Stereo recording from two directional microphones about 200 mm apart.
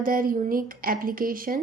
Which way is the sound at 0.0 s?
45° right (ahead or behind).